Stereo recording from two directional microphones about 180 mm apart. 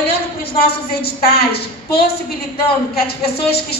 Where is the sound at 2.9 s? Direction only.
60° left (ahead or behind).